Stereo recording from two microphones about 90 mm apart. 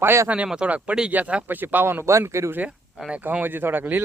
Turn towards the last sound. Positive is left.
turn(degrees=-20)  # may be behind; listen again after turning